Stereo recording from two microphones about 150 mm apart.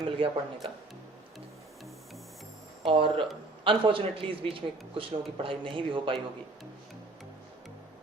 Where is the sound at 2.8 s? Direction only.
35° right (ahead or behind).